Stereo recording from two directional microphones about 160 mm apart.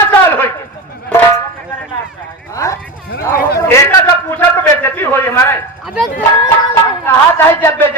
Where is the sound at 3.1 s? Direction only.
65° left (ahead or behind).